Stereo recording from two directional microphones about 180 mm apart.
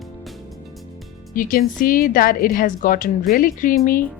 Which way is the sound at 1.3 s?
50° left (ahead or behind).